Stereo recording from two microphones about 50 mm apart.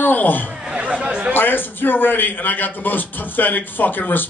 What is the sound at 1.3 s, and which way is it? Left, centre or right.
A man's voice, left.